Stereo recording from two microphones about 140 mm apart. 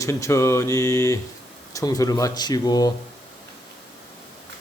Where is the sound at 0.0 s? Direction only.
20° left (ahead or behind).